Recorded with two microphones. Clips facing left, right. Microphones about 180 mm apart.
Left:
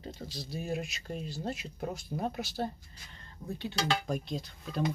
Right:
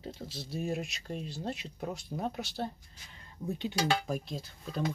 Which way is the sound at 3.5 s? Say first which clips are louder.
Right 2 dB; 15° right (ahead or behind).